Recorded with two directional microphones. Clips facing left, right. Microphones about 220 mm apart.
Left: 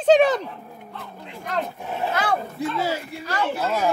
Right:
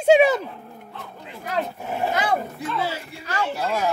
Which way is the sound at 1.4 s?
5° right (ahead or behind).